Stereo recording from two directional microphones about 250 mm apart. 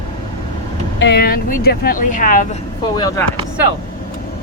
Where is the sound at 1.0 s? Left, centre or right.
Left.